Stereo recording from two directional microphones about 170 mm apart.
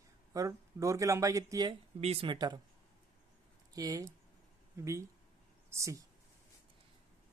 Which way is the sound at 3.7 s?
20° right (ahead or behind).